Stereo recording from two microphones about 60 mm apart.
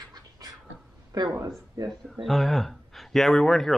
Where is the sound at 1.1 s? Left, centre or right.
Right.